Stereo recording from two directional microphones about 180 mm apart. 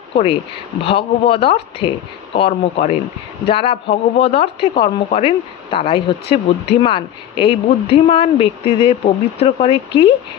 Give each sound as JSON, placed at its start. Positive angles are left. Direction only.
{"t": 0.1, "sound": "a woman's voice", "side_deg": 30}